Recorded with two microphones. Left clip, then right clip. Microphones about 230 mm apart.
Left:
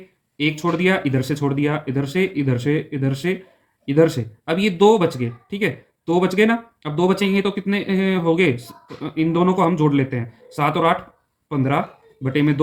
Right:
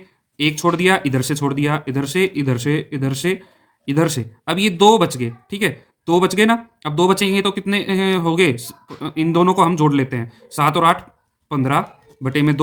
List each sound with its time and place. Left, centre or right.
0.3 s speech: right